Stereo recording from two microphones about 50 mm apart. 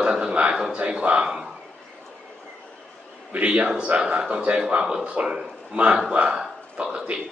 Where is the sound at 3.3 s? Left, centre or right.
Right.